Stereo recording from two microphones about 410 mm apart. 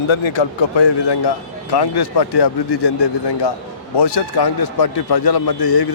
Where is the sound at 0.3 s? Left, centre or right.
Left.